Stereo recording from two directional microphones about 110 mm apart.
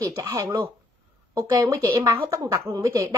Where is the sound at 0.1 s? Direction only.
30° right (ahead or behind).